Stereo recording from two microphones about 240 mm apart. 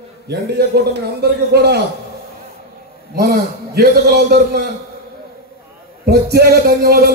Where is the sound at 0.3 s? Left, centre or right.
Right.